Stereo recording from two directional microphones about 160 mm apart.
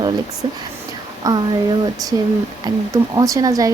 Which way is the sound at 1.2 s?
20° right (ahead or behind).